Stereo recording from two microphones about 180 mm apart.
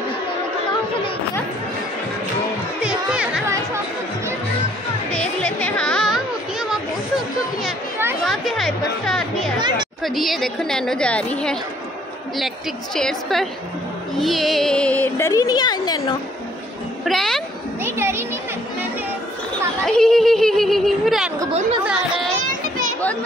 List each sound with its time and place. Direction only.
2.8 s chatter: 5° right (ahead or behind)
5.1 s music: 5° left (ahead or behind)
6.7 s a sound: centre (ahead or behind)
8.3 s a woman's voice: centre (ahead or behind)
9.6 s a woman's voice: 25° right (ahead or behind)
10.0 s a woman's voice: centre (ahead or behind)
12.9 s a woman's voice: centre (ahead or behind); by 16.2 s 20° left (ahead or behind)
17.0 s speech: centre (ahead or behind)
17.8 s children playing: 15° right (ahead or behind)
19.9 s a sound: 5° left (ahead or behind)
22.4 s children playing: 45° right (ahead or behind)